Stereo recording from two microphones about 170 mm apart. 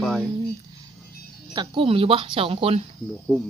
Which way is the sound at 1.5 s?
30° right (ahead or behind).